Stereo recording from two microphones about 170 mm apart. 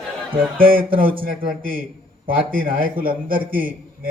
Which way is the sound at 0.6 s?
60° right (ahead or behind).